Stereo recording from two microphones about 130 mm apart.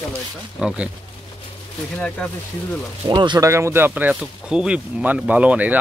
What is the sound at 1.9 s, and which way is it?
Speech, 10° left (ahead or behind).